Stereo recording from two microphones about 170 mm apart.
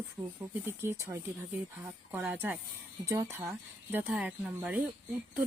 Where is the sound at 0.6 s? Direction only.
15° right (ahead or behind).